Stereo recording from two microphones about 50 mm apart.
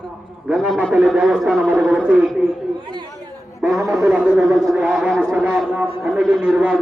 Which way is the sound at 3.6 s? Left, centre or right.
Centre.